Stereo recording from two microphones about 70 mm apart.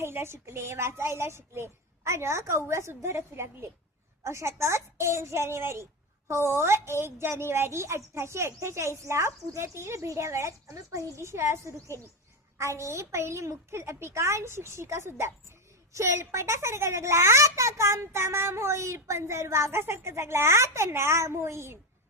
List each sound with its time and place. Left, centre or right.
0.0 s a child's voice: right